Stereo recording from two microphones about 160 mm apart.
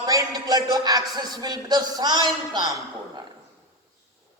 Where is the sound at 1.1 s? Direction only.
25° right (ahead or behind).